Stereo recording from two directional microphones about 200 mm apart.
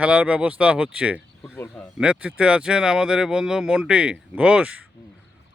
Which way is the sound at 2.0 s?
5° right (ahead or behind).